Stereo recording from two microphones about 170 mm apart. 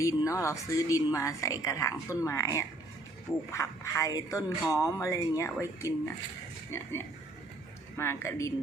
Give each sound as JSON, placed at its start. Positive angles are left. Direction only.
{"t": 0.0, "sound": "a woman's voice", "side_deg": 20}
{"t": 3.5, "sound": "a woman's voice", "side_deg": 20}